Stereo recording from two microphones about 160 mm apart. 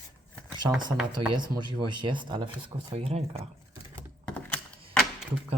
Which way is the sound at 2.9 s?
40° right (ahead or behind).